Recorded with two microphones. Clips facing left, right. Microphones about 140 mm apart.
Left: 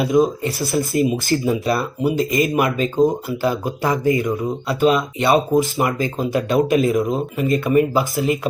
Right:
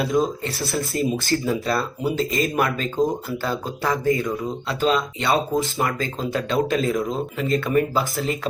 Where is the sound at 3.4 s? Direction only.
15° left (ahead or behind).